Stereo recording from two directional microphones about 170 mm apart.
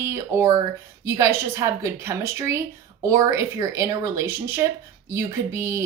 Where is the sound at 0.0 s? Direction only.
15° right (ahead or behind).